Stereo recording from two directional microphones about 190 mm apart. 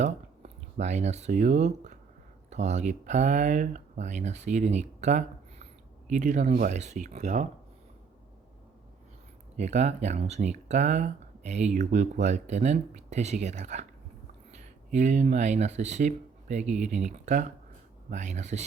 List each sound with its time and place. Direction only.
0.0 s speech: 35° right (ahead or behind)
9.6 s speech: 35° right (ahead or behind)